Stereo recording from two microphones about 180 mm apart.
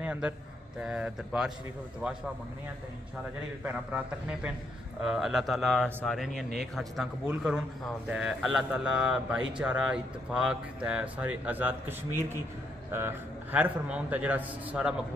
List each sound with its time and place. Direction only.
0.0 s a sound: 10° right (ahead or behind)
0.7 s a man's voice: 5° right (ahead or behind)
3.6 s a man's voice: 10° right (ahead or behind)
12.9 s a man's voice: 10° right (ahead or behind)